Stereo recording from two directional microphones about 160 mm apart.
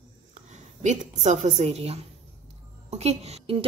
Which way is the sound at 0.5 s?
50° right (ahead or behind).